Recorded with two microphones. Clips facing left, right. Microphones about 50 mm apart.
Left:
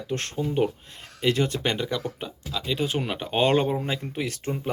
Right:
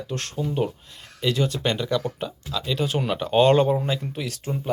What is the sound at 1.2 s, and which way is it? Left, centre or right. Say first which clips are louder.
Speech: even; left.